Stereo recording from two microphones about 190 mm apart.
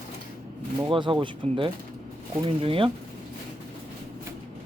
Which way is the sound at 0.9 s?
25° right (ahead or behind).